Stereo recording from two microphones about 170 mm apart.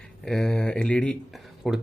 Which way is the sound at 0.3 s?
5° left (ahead or behind).